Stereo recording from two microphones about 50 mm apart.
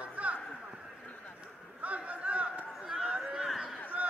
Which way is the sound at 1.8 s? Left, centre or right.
Right.